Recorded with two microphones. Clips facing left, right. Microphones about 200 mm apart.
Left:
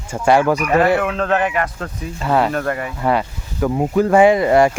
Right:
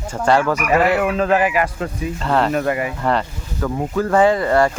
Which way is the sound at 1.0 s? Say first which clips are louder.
Right 2 dB; 5° right (ahead or behind).